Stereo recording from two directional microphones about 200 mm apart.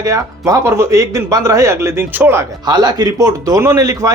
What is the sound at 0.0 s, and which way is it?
Speech, 15° right (ahead or behind).